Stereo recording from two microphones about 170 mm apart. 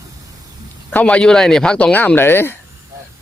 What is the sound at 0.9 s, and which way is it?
Speech, 5° left (ahead or behind).